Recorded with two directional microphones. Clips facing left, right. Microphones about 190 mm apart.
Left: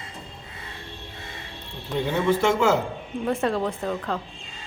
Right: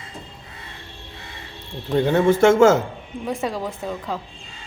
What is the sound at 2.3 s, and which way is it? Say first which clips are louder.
Speech: right 6 dB; 45° right (ahead or behind).